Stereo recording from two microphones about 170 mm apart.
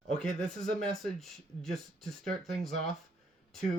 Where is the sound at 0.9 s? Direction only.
5° left (ahead or behind).